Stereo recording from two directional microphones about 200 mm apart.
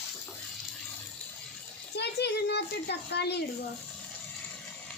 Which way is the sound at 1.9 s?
55° left (ahead or behind).